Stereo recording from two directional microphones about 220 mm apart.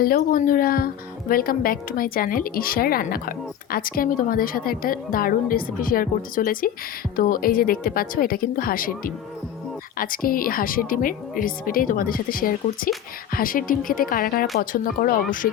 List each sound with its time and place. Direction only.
0.0 s a woman's voice: 40° left (ahead or behind)